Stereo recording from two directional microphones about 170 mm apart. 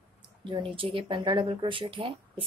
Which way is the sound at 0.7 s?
30° right (ahead or behind).